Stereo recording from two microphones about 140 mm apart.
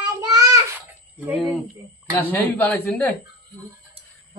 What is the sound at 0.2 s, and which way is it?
Child singing, 25° right (ahead or behind).